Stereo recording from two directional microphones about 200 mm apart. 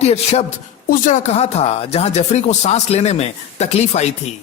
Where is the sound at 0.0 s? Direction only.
35° left (ahead or behind).